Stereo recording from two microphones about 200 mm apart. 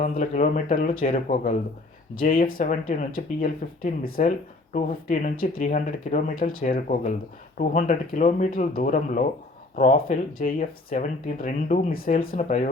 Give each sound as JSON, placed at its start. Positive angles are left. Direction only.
{"t": 0.0, "sound": "speech", "side_deg": 40}